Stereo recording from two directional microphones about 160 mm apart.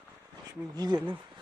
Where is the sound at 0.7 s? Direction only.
25° right (ahead or behind).